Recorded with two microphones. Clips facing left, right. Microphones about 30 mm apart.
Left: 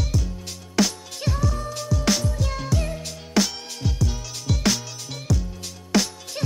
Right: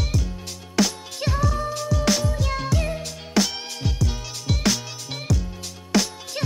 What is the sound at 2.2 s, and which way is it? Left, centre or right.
Music, centre.